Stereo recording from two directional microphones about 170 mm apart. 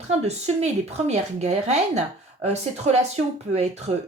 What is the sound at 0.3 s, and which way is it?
A woman's voice, 40° right (ahead or behind).